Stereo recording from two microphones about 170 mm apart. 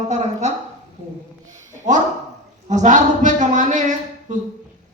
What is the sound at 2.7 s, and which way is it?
A man's voice, 45° right (ahead or behind).